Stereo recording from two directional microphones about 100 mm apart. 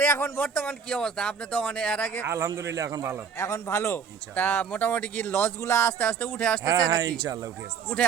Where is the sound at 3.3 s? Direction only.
30° left (ahead or behind); by 6.6 s 15° left (ahead or behind).